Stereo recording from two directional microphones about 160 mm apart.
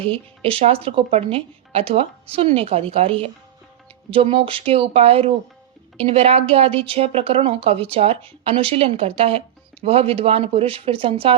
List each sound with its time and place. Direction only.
0.0 s a woman's voice: 35° right (ahead or behind)